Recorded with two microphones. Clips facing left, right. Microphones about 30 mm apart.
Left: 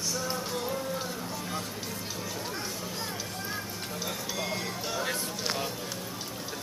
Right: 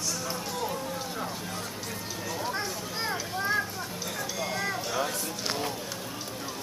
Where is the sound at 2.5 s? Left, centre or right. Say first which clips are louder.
Right 3 dB; right.